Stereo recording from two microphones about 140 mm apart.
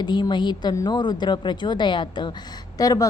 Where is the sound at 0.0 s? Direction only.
35° left (ahead or behind).